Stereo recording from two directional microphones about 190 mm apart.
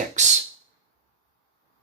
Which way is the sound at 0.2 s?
40° right (ahead or behind).